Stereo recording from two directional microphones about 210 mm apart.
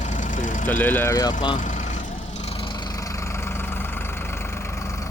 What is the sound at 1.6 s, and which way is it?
Vehicle, 35° left (ahead or behind).